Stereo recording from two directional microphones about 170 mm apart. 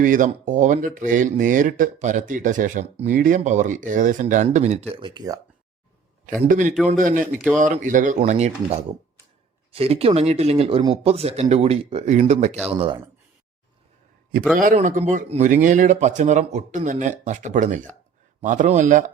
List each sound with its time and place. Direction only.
0.0 s speech: 50° right (ahead or behind)
4.9 s speech: 25° right (ahead or behind)
6.5 s speech: 50° right (ahead or behind)
14.5 s speech: 50° right (ahead or behind)